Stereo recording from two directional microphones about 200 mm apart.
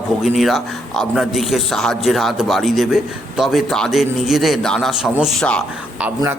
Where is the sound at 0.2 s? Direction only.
Centre (ahead or behind).